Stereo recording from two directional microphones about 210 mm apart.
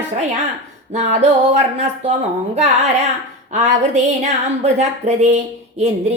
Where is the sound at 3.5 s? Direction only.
35° right (ahead or behind).